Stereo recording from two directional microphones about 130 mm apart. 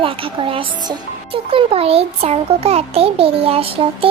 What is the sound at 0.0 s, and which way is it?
A child's voice, 45° right (ahead or behind).